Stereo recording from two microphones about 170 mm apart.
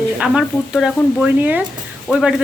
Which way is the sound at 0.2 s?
5° right (ahead or behind).